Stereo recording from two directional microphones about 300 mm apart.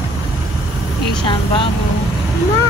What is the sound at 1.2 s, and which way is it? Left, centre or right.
Vehicle, centre.